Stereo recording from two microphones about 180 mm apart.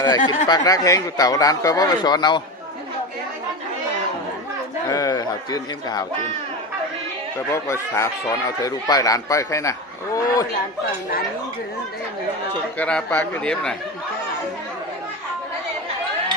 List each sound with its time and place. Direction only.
0.0 s speech: 25° left (ahead or behind)
4.9 s speech: 20° left (ahead or behind)
7.3 s speech: 15° left (ahead or behind)
12.8 s speech: 5° left (ahead or behind)